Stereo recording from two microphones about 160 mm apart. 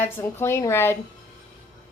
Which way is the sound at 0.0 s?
15° left (ahead or behind).